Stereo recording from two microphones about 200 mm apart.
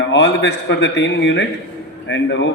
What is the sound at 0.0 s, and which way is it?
A man's voice, 60° left (ahead or behind).